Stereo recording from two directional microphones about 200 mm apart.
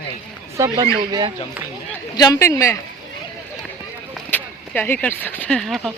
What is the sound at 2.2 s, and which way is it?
Speech, 15° left (ahead or behind).